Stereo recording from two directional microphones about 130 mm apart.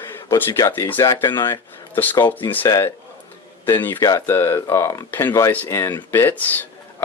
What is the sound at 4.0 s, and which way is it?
Speech, 25° left (ahead or behind).